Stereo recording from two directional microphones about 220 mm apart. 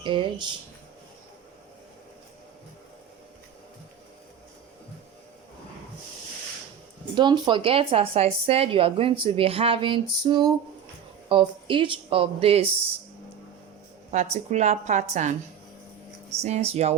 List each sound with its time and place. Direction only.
0.0 s speech: 20° right (ahead or behind)
7.2 s speech: 20° right (ahead or behind)
14.1 s a woman's voice: 30° right (ahead or behind)